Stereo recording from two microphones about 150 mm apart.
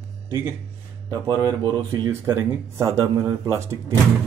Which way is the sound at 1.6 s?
20° right (ahead or behind).